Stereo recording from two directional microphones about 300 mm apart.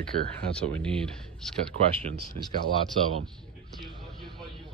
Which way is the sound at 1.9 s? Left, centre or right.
Centre.